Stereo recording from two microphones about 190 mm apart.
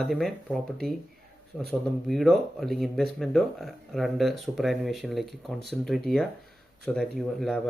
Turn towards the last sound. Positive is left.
turn(degrees=0)  # may be behind; listen again after turning